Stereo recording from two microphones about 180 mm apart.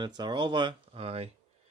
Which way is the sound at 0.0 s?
25° right (ahead or behind).